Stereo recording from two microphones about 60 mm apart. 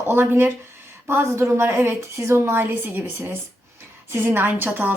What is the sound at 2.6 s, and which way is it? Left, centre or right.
A woman's voice, right.